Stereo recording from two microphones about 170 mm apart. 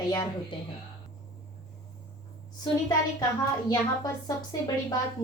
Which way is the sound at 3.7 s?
20° left (ahead or behind).